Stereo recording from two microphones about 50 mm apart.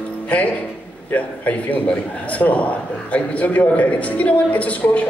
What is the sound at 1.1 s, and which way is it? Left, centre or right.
A man's voice, left.